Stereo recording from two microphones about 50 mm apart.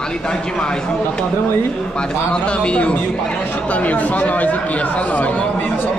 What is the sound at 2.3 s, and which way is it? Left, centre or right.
Speech, left.